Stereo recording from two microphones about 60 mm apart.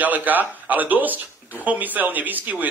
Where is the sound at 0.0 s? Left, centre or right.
Right.